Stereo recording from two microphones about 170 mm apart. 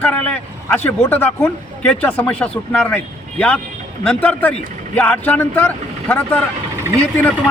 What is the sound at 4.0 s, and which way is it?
A man's voice, 5° left (ahead or behind).